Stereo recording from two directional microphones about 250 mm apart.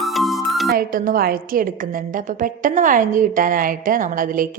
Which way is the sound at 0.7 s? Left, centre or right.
Right.